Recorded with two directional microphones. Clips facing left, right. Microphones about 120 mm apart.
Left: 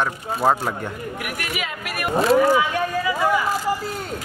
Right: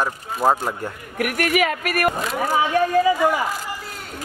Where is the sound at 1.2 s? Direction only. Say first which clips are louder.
Right 12 dB; 55° right (ahead or behind).